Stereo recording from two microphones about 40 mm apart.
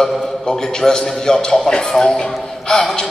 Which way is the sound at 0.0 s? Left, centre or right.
Centre.